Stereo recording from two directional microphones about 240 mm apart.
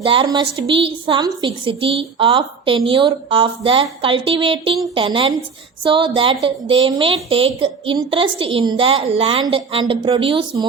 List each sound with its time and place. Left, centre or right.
0.0 s a woman's voice: right